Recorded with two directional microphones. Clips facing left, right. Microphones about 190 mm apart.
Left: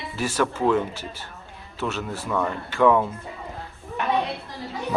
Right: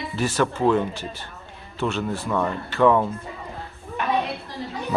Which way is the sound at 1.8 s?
5° left (ahead or behind).